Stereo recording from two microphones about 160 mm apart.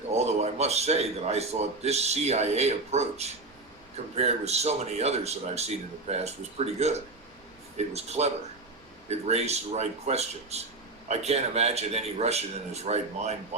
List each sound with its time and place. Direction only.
0.1 s a man's voice: 45° right (ahead or behind)
7.9 s a man's voice: 40° right (ahead or behind)